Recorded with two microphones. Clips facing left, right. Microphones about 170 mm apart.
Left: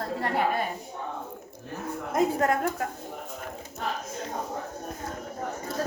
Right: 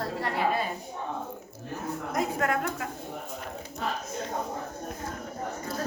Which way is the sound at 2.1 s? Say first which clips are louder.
Left 4 dB; 35° left (ahead or behind).